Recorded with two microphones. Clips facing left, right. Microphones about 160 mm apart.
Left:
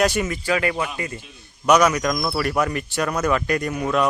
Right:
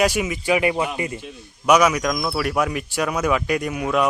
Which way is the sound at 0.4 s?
15° right (ahead or behind).